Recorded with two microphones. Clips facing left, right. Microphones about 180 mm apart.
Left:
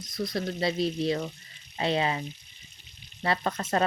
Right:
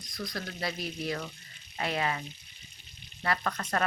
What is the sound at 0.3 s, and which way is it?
Speech, 25° left (ahead or behind).